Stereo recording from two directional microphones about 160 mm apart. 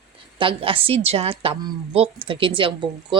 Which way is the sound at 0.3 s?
35° right (ahead or behind).